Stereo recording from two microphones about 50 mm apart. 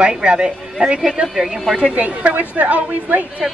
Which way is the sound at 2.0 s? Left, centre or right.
Right.